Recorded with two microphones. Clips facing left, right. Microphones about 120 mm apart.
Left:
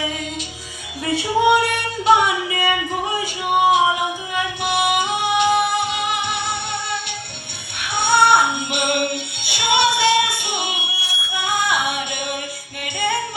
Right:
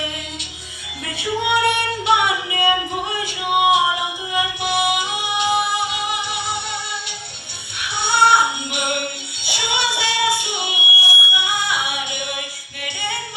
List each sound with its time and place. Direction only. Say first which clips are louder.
1.1 s music: left 6 dB; 30° left (ahead or behind)
1.5 s a sound: right 1 dB; 40° left (ahead or behind)
2.5 s singing: right 1 dB; 20° right (ahead or behind)
3.5 s music: left 1 dB; 15° right (ahead or behind)
4.6 s music: left 3 dB; 50° left (ahead or behind)
7.8 s music: left 2 dB; 50° left (ahead or behind)